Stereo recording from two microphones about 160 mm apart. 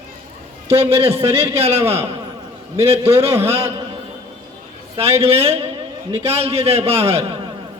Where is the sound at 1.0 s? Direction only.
35° right (ahead or behind).